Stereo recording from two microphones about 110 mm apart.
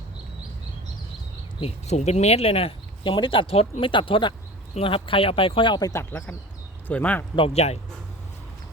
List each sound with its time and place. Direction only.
1.6 s speech: 90° left; by 5.8 s 50° left (ahead or behind)
5.8 s speech: 25° left (ahead or behind)
7.3 s speech: 65° left (ahead or behind)